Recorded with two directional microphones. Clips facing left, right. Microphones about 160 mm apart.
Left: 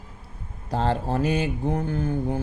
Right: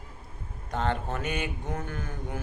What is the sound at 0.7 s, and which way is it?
Speech, 35° left (ahead or behind).